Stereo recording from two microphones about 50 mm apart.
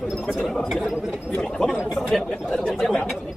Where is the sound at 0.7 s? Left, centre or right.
Centre.